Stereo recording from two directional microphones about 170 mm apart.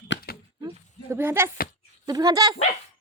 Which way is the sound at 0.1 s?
90° left.